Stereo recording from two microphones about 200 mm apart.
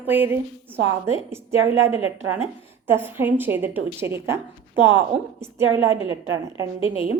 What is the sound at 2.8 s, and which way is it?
Speech, 10° right (ahead or behind).